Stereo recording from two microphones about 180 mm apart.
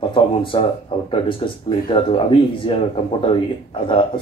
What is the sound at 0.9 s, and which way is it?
Speech, 30° left (ahead or behind).